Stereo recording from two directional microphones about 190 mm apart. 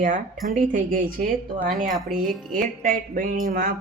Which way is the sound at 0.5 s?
45° right (ahead or behind).